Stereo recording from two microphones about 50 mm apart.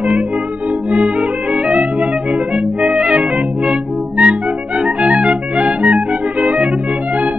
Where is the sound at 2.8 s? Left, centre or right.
Right.